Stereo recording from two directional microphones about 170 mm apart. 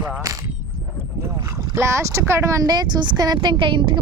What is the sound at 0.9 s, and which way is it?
A woman's voice, 20° right (ahead or behind).